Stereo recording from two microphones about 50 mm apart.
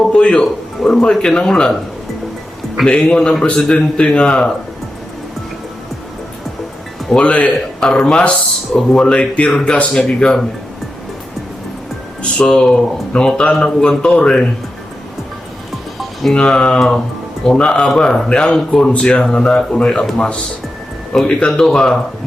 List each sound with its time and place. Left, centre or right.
0.1 s speech: left
0.8 s speech: centre
2.8 s speech: centre
7.2 s speech: left
7.8 s speech: centre
12.2 s speech: centre
16.3 s speech: centre
18.9 s speech: left
21.5 s speech: centre